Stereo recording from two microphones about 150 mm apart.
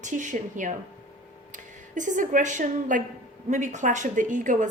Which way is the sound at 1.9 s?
55° right (ahead or behind).